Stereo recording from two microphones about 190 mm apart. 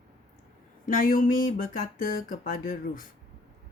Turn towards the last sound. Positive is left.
turn(degrees=45)  # may be behind; listen again after turning